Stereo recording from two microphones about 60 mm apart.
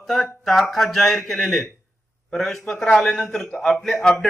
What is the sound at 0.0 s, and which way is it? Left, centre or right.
A man's voice, centre.